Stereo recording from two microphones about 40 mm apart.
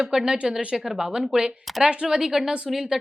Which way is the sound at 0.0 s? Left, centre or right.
Centre.